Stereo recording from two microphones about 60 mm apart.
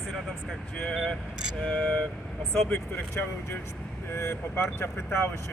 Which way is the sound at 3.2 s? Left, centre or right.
Left.